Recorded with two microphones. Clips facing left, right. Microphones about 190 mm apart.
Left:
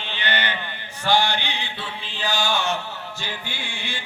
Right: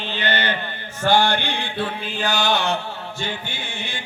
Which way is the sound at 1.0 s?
55° right (ahead or behind).